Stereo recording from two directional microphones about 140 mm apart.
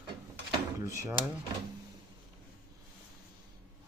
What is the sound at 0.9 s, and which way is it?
Speech, 20° right (ahead or behind).